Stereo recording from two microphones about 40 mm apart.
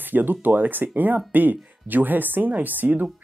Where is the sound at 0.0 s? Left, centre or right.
Right.